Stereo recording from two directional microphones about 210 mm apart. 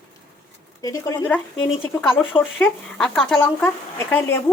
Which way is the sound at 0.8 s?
15° left (ahead or behind).